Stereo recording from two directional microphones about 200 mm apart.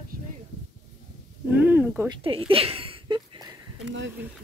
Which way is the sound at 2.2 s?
25° right (ahead or behind).